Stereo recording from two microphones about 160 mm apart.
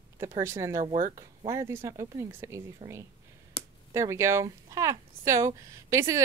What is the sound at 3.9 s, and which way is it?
Speech, 20° right (ahead or behind).